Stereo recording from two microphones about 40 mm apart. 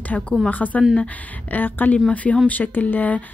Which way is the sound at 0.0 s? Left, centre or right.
Left.